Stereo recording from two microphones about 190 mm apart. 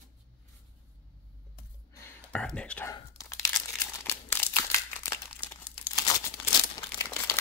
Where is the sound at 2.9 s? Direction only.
15° left (ahead or behind).